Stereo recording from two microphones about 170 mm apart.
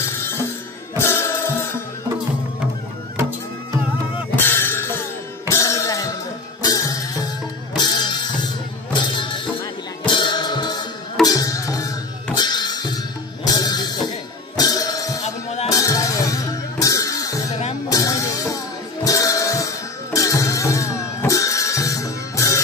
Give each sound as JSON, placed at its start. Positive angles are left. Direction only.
{"t": 0.9, "sound": "music", "side_deg": 15}
{"t": 3.2, "sound": "music", "side_deg": -15}
{"t": 4.5, "sound": "music", "side_deg": 15}
{"t": 15.2, "sound": "music", "side_deg": 40}
{"t": 15.7, "sound": "music", "side_deg": 20}